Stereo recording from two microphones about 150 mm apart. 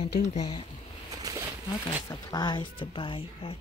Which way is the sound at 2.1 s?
25° left (ahead or behind).